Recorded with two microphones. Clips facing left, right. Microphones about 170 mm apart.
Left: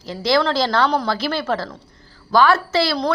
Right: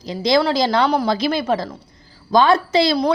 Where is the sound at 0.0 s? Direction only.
15° right (ahead or behind).